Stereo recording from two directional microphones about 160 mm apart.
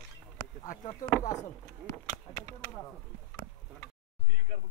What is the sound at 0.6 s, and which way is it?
Speech, 55° left (ahead or behind).